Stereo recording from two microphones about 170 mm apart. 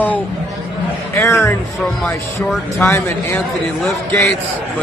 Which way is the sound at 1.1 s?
15° left (ahead or behind).